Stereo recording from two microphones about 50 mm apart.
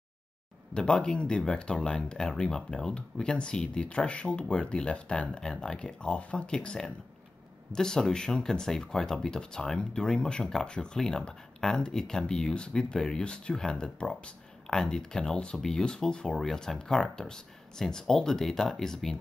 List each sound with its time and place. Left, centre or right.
0.7 s speech: centre